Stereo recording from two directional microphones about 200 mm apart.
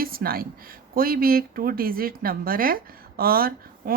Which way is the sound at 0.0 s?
45° right (ahead or behind).